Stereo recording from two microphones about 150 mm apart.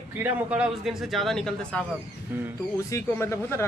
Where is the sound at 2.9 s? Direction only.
20° left (ahead or behind).